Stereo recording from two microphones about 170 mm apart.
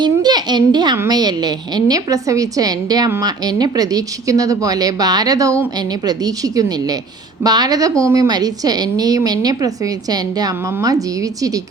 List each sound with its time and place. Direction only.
0.0 s a child's voice: 25° right (ahead or behind)